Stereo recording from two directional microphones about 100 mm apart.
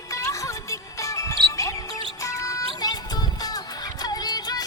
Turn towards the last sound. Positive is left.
turn(degrees=40)  # may be behind; listen again after turning